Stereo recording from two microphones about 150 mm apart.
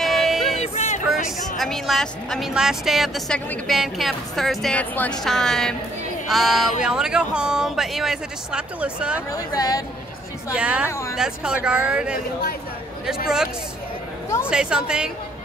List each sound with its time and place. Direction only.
0.0 s a sound: centre (ahead or behind)
0.6 s a sound: 50° left (ahead or behind)
1.6 s speech: centre (ahead or behind)
9.3 s speech: 25° left (ahead or behind)
10.5 s speech: 10° right (ahead or behind)
10.9 s speech: 20° left (ahead or behind)
11.1 s speech: 5° right (ahead or behind)
14.5 s speech: 5° right (ahead or behind)